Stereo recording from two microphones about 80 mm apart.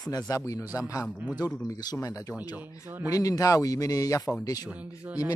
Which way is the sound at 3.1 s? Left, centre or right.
Left.